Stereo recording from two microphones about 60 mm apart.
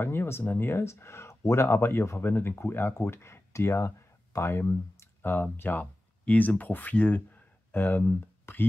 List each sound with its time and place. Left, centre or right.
0.0 s speech: left
5.2 s speech: left